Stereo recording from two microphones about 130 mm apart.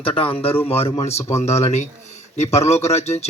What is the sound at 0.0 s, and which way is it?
A man's voice, 45° left (ahead or behind).